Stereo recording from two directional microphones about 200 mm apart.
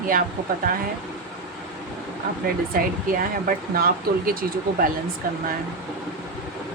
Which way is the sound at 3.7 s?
50° right (ahead or behind).